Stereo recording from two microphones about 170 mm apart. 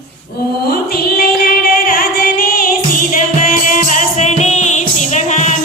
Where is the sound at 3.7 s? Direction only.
50° left (ahead or behind).